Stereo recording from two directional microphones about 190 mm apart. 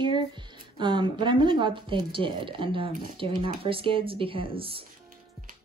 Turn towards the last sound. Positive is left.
turn(degrees=-30)  # may be behind; listen again after turning